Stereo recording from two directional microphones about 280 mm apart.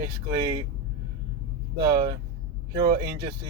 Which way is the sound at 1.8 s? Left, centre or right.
Centre.